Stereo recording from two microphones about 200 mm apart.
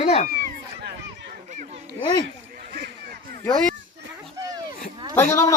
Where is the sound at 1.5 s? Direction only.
40° right (ahead or behind).